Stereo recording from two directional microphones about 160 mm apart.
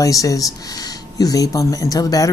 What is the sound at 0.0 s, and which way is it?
Speech, 20° left (ahead or behind).